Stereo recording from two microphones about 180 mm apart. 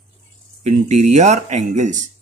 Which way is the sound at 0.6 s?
40° right (ahead or behind).